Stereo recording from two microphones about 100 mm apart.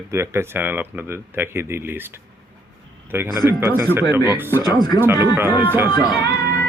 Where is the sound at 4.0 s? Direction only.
40° left (ahead or behind).